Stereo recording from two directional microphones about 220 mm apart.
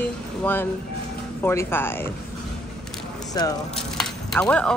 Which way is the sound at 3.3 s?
15° left (ahead or behind).